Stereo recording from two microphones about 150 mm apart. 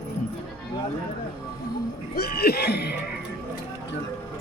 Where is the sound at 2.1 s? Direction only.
90° left.